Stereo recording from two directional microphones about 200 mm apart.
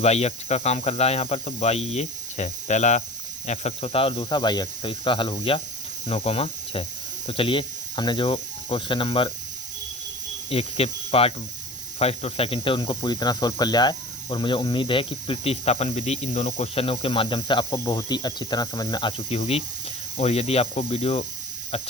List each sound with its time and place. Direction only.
0.0 s cricket: 30° left (ahead or behind)
3.4 s snake: 35° left (ahead or behind)
7.3 s speech: 25° left (ahead or behind)
10.5 s snake: 30° left (ahead or behind)
19.4 s cricket: 30° left (ahead or behind)